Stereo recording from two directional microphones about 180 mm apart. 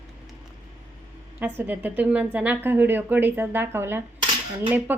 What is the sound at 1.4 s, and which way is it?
A woman's voice, 10° right (ahead or behind).